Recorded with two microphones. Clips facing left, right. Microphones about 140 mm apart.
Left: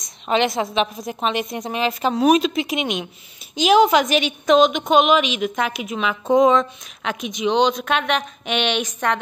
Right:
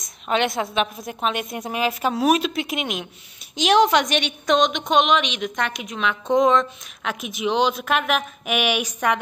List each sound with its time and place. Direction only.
0.0 s a woman's voice: centre (ahead or behind)